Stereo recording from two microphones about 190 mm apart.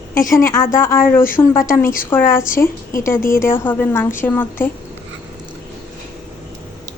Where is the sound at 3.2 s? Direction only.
45° left (ahead or behind).